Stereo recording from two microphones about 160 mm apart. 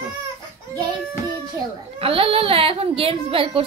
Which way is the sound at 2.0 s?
35° right (ahead or behind).